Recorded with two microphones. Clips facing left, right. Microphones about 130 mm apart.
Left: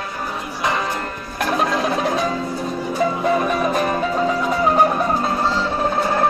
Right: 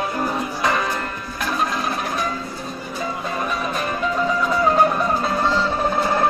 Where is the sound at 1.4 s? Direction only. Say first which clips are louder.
Left 4 dB; 75° left (ahead or behind).